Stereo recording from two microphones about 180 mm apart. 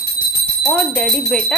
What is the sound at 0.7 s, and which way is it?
Speech, 5° left (ahead or behind).